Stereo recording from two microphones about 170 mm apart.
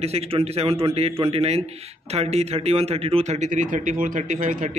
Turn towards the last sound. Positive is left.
turn(degrees=-50)  # may be behind; listen again after turning